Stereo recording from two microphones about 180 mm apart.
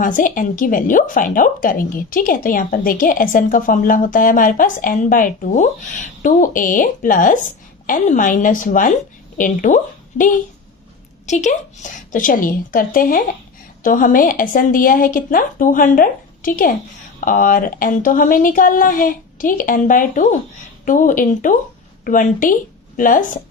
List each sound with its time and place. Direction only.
0.0 s a woman's voice: 50° left (ahead or behind)